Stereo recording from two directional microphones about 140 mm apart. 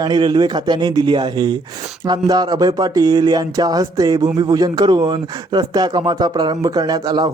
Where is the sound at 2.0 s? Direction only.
30° right (ahead or behind).